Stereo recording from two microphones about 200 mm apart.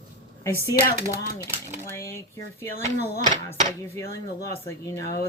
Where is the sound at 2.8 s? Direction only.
35° right (ahead or behind).